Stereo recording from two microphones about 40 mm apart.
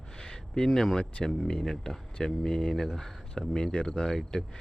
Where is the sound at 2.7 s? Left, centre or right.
Centre.